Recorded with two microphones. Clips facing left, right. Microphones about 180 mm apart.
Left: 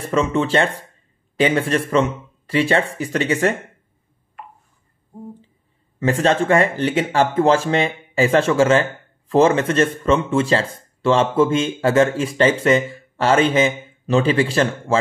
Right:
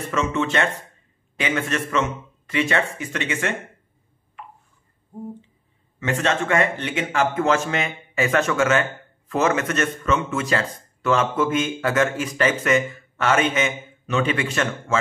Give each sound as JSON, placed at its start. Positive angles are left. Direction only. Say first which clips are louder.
{"t": 0.1, "sound": "speech", "louder": "left 5 dB", "side_deg": 35}
{"t": 5.9, "sound": "speech", "louder": "left 5 dB", "side_deg": 35}